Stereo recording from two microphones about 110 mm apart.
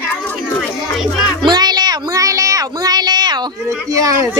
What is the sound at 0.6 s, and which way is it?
Speech, centre (ahead or behind).